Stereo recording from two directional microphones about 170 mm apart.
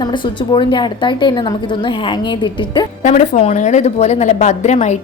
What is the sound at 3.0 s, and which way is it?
A woman's voice, 45° left (ahead or behind).